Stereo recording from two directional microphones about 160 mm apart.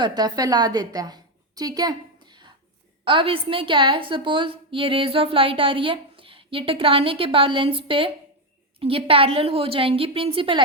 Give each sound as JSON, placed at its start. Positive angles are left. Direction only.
{"t": 0.0, "sound": "a woman's voice", "side_deg": -25}